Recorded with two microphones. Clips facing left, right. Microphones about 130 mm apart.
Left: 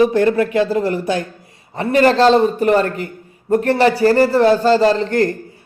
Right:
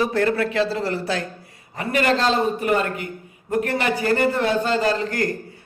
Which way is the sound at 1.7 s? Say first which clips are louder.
Left 8 dB; 30° left (ahead or behind).